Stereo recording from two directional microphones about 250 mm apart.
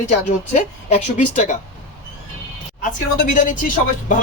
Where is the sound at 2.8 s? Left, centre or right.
Left.